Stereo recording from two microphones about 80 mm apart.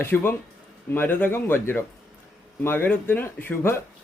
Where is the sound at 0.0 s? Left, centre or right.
Left.